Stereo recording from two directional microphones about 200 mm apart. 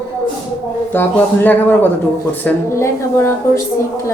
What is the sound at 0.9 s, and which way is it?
A woman's voice, 10° left (ahead or behind).